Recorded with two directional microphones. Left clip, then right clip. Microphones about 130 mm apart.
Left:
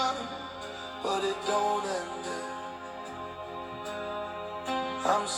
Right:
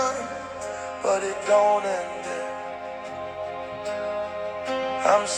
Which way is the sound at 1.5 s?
40° right (ahead or behind).